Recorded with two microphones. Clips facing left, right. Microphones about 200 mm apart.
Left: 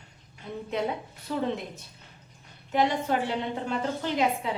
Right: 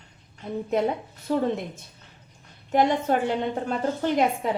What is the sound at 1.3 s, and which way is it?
Speech, 40° right (ahead or behind).